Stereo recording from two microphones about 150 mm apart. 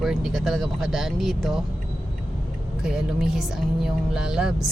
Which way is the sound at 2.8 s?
5° right (ahead or behind).